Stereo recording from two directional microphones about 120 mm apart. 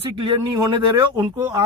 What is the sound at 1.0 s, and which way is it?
Speech, 20° right (ahead or behind).